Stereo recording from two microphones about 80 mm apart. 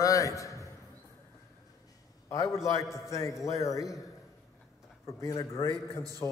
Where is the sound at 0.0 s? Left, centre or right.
Left.